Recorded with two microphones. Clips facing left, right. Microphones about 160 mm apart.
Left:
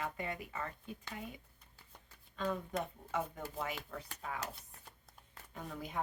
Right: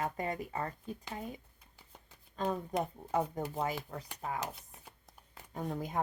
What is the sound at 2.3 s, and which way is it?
Speech, 35° right (ahead or behind).